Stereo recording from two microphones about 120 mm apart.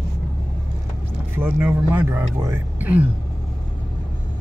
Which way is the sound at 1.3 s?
20° right (ahead or behind).